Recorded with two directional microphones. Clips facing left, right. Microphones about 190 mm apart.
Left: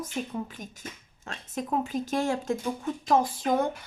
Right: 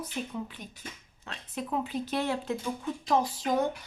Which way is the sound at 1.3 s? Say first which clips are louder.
Left 3 dB; 45° left (ahead or behind).